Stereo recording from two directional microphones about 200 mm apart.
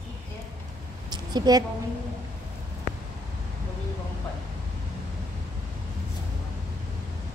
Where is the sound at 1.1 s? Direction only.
20° right (ahead or behind).